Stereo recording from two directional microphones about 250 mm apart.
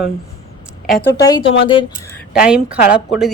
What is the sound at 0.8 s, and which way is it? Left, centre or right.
Speech, centre.